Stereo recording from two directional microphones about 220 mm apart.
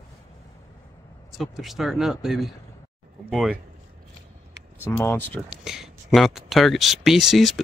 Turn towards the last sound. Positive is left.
turn(degrees=0)  # may be behind; listen again after turning